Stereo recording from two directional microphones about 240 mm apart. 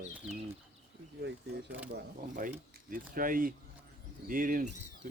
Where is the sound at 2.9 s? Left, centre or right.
Right.